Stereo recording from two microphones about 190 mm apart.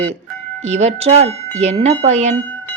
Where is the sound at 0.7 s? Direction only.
35° right (ahead or behind).